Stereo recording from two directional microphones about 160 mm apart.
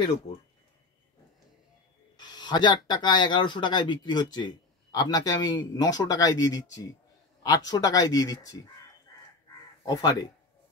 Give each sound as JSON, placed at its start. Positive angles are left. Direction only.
{"t": 2.1, "sound": "speech", "side_deg": 25}
{"t": 9.8, "sound": "speech", "side_deg": 25}